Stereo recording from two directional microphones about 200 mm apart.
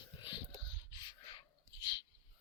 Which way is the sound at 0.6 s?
20° left (ahead or behind).